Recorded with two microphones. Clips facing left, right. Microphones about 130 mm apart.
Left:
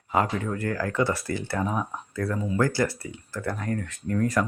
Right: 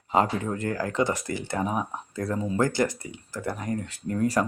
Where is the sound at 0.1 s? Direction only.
25° right (ahead or behind).